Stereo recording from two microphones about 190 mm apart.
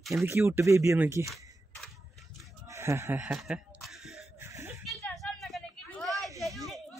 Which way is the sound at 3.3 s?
Centre (ahead or behind).